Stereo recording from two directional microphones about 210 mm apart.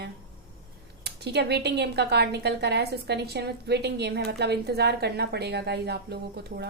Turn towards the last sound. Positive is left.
turn(degrees=-50)  # may be behind; listen again after turning